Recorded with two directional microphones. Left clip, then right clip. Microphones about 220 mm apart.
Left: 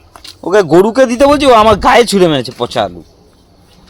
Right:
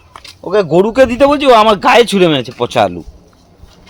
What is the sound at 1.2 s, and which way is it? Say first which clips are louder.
Speech: left 2 dB; 25° left (ahead or behind).